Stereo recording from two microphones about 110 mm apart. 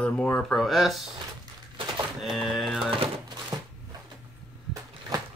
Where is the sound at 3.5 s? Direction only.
35° right (ahead or behind).